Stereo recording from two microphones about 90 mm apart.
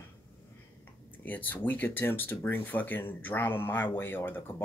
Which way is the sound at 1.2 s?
20° left (ahead or behind).